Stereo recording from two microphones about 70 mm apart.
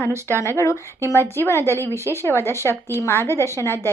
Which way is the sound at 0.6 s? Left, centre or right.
Left.